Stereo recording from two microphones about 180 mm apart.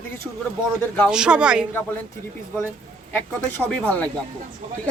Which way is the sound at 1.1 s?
5° right (ahead or behind).